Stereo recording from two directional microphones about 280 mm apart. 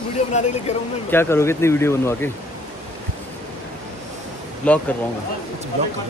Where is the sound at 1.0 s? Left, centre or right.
Centre.